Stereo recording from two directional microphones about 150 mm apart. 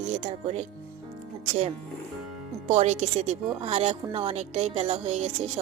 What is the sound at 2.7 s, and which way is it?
A woman's voice, 50° right (ahead or behind).